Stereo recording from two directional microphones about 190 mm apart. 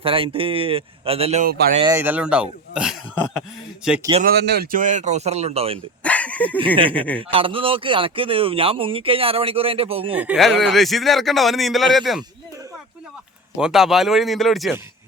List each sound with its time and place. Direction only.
0.0 s speech: 30° right (ahead or behind)
1.9 s speech: 10° right (ahead or behind)
4.2 s speech: 55° right (ahead or behind); by 5.8 s 30° right (ahead or behind)
6.0 s a sound: 5° left (ahead or behind)
6.9 s speech: 10° left (ahead or behind)
7.2 s speech: 30° right (ahead or behind)
10.2 s speech: 5° right (ahead or behind)
13.6 s speech: 5° right (ahead or behind)